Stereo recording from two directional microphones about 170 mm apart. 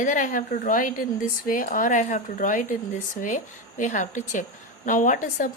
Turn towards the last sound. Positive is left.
turn(degrees=55)  # may be behind; listen again after turning